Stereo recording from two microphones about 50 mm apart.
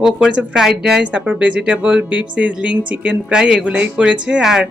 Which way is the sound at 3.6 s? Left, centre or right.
Right.